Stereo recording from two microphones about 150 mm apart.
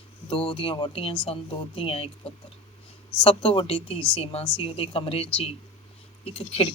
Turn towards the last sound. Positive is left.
turn(degrees=40)  # may be behind; listen again after turning